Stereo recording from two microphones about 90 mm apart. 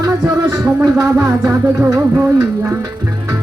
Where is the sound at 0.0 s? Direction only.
35° right (ahead or behind).